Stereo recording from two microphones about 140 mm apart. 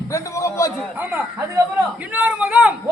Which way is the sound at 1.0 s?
10° right (ahead or behind).